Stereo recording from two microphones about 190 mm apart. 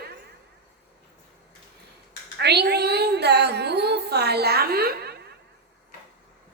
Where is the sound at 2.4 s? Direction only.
60° right (ahead or behind).